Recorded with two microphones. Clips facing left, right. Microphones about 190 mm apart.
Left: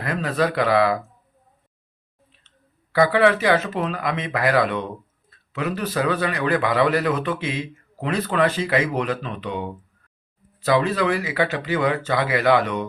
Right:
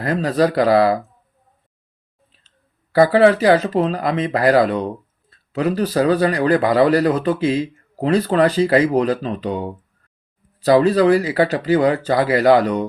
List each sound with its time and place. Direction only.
0.0 s speech: 35° right (ahead or behind)
2.9 s speech: 35° right (ahead or behind)